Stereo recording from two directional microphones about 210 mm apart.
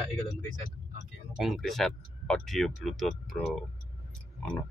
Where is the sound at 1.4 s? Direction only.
Centre (ahead or behind).